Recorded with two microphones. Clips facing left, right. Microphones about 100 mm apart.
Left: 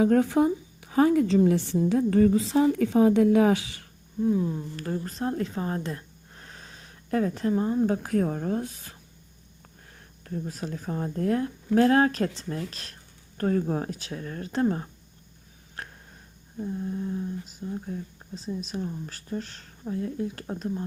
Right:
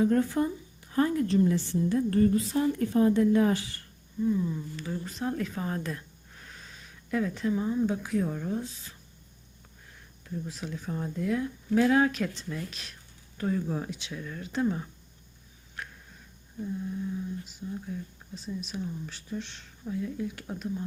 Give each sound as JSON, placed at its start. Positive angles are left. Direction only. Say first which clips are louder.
{"t": 0.0, "sound": "a woman's voice", "louder": "left 4 dB", "side_deg": 90}
{"t": 5.1, "sound": "speech", "louder": "left 1 dB", "side_deg": 35}
{"t": 6.4, "sound": "speech", "louder": "left 2 dB", "side_deg": 40}
{"t": 10.2, "sound": "speech", "louder": "left 3 dB", "side_deg": 55}
{"t": 13.3, "sound": "speech", "louder": "left 4 dB", "side_deg": 55}
{"t": 16.6, "sound": "speech", "louder": "left 3 dB", "side_deg": 30}
{"t": 20.2, "sound": "speech", "louder": "left 3 dB", "side_deg": 35}